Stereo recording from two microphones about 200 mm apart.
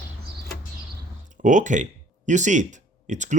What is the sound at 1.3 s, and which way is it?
Speech, 40° right (ahead or behind).